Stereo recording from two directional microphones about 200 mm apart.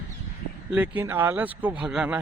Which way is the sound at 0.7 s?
10° right (ahead or behind).